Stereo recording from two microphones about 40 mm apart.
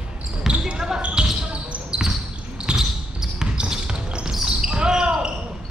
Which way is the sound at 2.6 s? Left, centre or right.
Centre.